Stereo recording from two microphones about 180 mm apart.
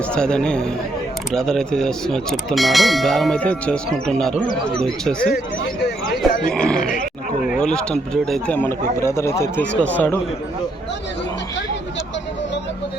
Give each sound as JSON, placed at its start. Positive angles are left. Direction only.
{"t": 0.1, "sound": "speech", "side_deg": 5}
{"t": 6.5, "sound": "speech", "side_deg": 5}
{"t": 6.8, "sound": "roaring cats", "side_deg": 50}
{"t": 7.5, "sound": "speech", "side_deg": 5}